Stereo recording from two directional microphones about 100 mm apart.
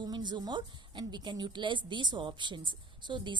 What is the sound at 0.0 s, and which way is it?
A woman's voice, 45° right (ahead or behind).